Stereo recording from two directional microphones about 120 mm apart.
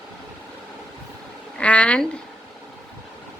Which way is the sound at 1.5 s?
10° left (ahead or behind).